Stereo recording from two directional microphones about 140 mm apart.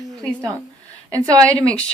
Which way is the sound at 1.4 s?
10° left (ahead or behind).